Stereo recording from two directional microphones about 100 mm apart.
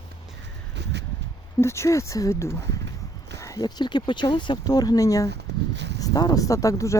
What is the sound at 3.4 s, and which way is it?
A woman's voice, 40° left (ahead or behind).